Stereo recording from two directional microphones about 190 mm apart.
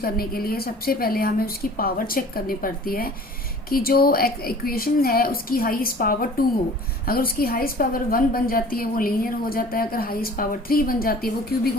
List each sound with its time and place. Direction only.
0.0 s a woman's voice: 50° left (ahead or behind)